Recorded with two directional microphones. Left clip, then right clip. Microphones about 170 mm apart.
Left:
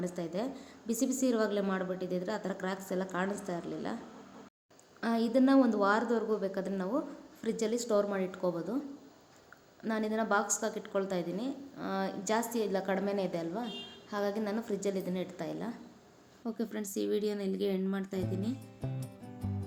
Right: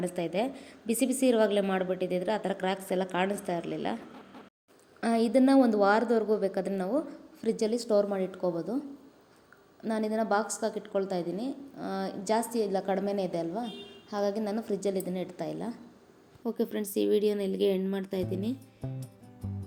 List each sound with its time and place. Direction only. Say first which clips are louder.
0.2 s a woman's voice: right 6 dB; 15° right (ahead or behind)
4.9 s a woman's voice: right 4 dB; 15° right (ahead or behind)
9.8 s a woman's voice: right 3 dB; 15° right (ahead or behind)